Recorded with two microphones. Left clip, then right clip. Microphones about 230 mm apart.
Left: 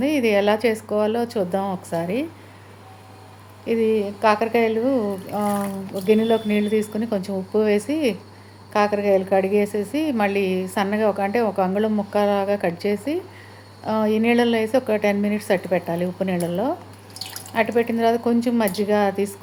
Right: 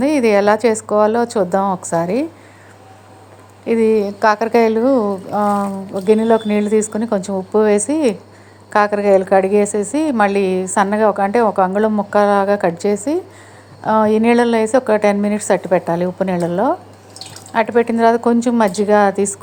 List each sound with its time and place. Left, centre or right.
0.0 s a woman's voice: right
3.7 s a woman's voice: right